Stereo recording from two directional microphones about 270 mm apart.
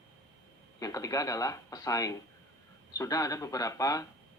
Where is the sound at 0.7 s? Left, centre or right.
Centre.